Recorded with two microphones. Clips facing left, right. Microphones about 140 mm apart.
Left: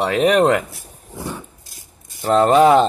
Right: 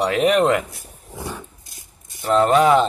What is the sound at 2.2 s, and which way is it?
Speech, 40° left (ahead or behind).